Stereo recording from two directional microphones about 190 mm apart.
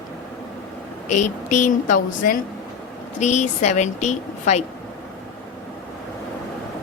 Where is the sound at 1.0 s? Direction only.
40° left (ahead or behind).